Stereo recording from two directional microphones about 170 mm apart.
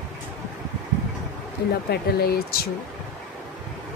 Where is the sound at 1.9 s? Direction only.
65° left (ahead or behind).